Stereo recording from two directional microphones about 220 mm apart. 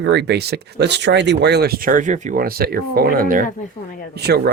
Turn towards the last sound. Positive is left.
turn(degrees=-45)  # may be behind; listen again after turning